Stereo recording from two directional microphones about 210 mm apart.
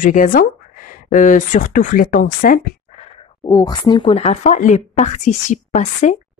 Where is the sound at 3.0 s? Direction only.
25° left (ahead or behind).